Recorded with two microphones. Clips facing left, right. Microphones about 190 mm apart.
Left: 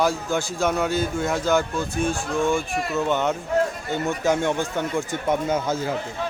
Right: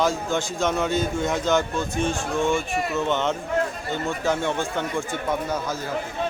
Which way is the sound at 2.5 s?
Centre (ahead or behind).